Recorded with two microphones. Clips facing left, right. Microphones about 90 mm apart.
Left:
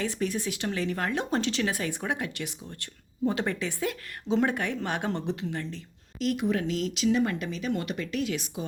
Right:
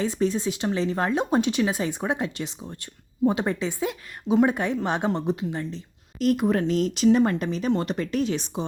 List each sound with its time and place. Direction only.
0.0 s speech: 25° right (ahead or behind)
6.1 s speech: 45° right (ahead or behind)